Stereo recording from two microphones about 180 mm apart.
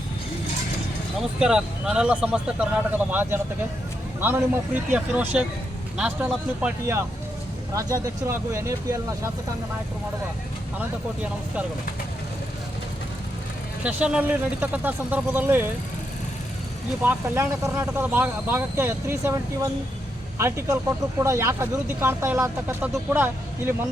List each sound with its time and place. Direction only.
1.4 s speech: 5° right (ahead or behind)
10.8 s speech: 5° right (ahead or behind)
13.8 s speech: 5° right (ahead or behind)
17.0 s speech: 10° right (ahead or behind)